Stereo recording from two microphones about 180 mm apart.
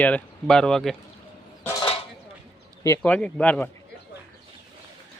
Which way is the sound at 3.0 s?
5° left (ahead or behind).